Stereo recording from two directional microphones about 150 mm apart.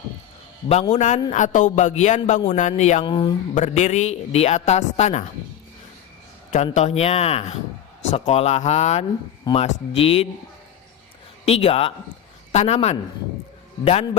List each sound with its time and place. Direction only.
0.7 s speech: 45° left (ahead or behind)
3.0 s speech: 35° left (ahead or behind)
3.5 s speech: 50° left (ahead or behind)
6.7 s speech: 45° left (ahead or behind)
11.4 s speech: 40° left (ahead or behind)